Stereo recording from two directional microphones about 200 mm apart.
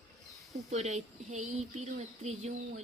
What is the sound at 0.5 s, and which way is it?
A woman's voice, 35° right (ahead or behind).